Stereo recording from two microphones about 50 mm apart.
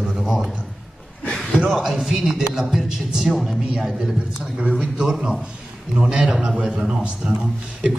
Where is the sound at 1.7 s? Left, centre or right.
Centre.